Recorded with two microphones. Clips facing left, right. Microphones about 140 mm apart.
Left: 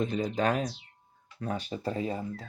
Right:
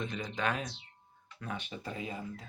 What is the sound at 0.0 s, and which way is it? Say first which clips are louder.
Speech: left 7 dB; 35° left (ahead or behind).